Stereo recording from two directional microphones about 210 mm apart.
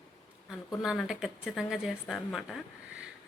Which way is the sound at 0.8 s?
Centre (ahead or behind).